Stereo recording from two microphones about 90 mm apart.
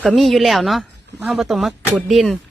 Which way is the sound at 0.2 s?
Centre (ahead or behind).